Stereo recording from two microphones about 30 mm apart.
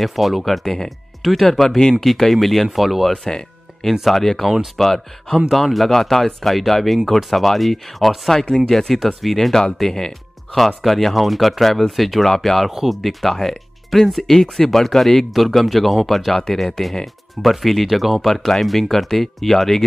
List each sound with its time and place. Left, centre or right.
0.0 s speech: centre
3.1 s speech: left
4.1 s speech: centre
8.3 s speech: centre
15.3 s speech: centre
16.3 s speech: centre
17.0 s speech: centre
18.3 s speech: centre